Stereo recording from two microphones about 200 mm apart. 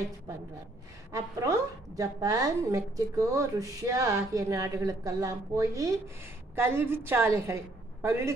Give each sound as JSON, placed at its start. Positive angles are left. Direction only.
{"t": 1.1, "sound": "a woman's voice", "side_deg": -15}